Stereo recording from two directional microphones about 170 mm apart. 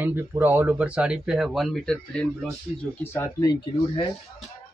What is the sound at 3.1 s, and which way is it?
Speech, 15° left (ahead or behind).